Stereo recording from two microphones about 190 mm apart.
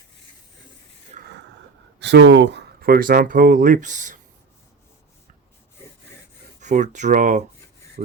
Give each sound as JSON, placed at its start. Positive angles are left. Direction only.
{"t": 1.1, "sound": "a sound", "side_deg": -40}
{"t": 2.0, "sound": "speech", "side_deg": -65}
{"t": 6.6, "sound": "speech", "side_deg": -40}